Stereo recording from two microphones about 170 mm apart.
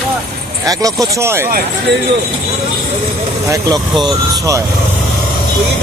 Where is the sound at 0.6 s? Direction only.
20° right (ahead or behind).